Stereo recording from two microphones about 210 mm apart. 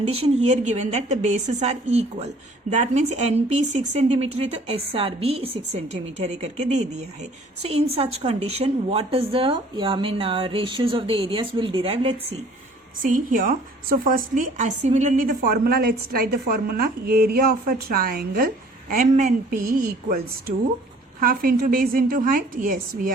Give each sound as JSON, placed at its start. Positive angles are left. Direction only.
{"t": 0.0, "sound": "a woman's voice", "side_deg": -30}
{"t": 13.0, "sound": "a woman's voice", "side_deg": -40}
{"t": 21.2, "sound": "a woman's voice", "side_deg": -45}